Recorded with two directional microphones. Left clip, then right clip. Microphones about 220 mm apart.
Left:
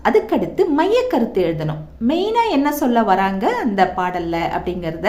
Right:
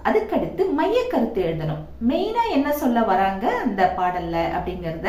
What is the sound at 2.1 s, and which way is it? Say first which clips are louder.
A woman's voice: left 4 dB; 50° left (ahead or behind).